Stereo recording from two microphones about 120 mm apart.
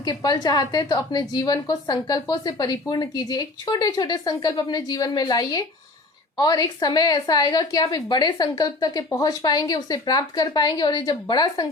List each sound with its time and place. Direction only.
0.0 s a woman's voice: 35° left (ahead or behind)